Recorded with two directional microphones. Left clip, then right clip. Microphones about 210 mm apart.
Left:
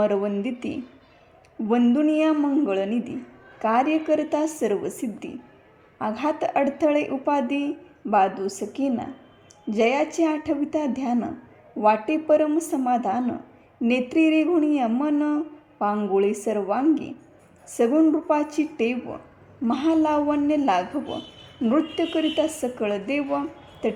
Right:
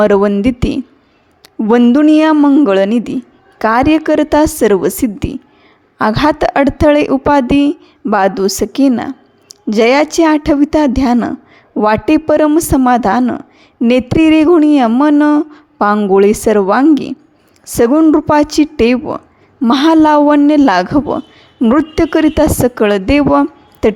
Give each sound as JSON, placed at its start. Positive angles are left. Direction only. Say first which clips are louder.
{"t": 0.0, "sound": "speech", "louder": "right 13 dB", "side_deg": -40}